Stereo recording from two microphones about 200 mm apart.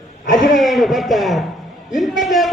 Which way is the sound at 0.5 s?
Centre (ahead or behind).